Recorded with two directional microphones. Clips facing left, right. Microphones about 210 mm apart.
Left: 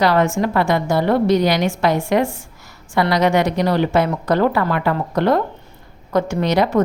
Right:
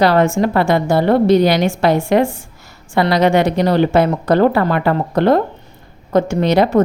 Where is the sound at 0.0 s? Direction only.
30° right (ahead or behind).